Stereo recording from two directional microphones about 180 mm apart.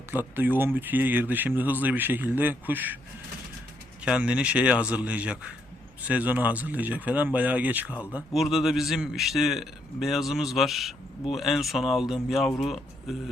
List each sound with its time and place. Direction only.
0.1 s speech: 10° right (ahead or behind)
4.0 s a man's voice: 5° right (ahead or behind)